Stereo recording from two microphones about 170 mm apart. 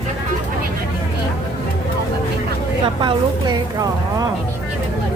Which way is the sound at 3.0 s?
25° right (ahead or behind).